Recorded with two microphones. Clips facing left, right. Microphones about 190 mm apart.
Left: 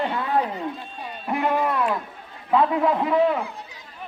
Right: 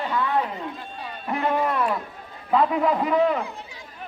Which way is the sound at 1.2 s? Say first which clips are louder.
Left 1 dB; 5° left (ahead or behind).